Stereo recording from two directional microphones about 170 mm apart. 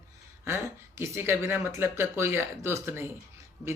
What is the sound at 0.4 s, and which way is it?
Speech, 15° right (ahead or behind).